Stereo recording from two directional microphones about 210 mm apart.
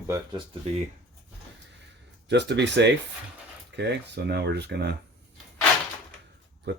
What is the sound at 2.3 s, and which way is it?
Speech, 55° right (ahead or behind).